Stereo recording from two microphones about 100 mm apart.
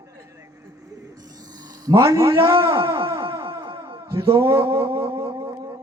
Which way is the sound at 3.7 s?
60° right (ahead or behind).